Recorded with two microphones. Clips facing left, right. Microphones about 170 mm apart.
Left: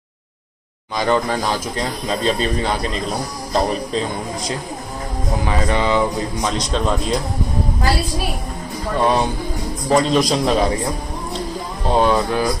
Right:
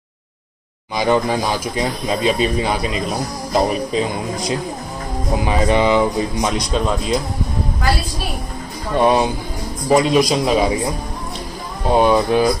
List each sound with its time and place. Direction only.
0.9 s speech: 10° right (ahead or behind)
5.3 s speech: 15° right (ahead or behind)
8.9 s speech: 15° right (ahead or behind)
11.9 s speech: 15° right (ahead or behind)